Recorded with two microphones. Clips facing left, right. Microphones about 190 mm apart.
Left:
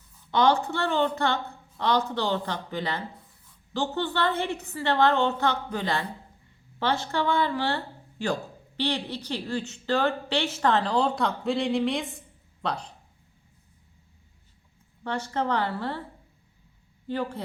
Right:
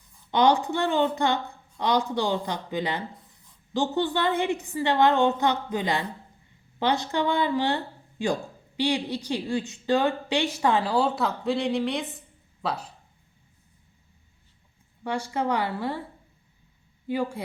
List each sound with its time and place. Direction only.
0.3 s speech: 15° right (ahead or behind)
15.0 s speech: 10° right (ahead or behind)
17.1 s speech: 10° right (ahead or behind)